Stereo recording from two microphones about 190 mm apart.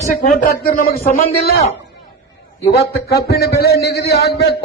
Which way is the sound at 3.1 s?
60° left (ahead or behind).